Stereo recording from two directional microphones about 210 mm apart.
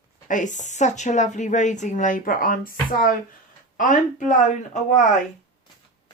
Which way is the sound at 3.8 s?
35° left (ahead or behind).